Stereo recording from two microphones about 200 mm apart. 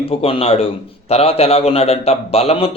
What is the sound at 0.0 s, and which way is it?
Speech, 30° left (ahead or behind).